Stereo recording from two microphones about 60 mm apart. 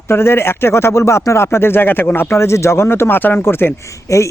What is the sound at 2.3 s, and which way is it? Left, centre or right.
Speech, left.